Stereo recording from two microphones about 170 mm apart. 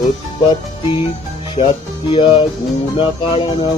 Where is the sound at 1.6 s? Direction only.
30° left (ahead or behind).